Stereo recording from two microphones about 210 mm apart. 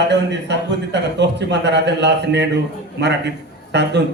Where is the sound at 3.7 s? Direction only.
55° right (ahead or behind).